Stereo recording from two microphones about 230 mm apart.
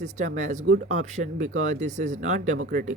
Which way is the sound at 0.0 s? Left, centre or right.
Right.